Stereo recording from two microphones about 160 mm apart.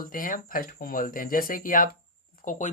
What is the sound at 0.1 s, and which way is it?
Speech, 60° left (ahead or behind).